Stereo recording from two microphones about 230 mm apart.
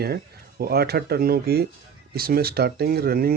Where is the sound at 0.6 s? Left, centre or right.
Right.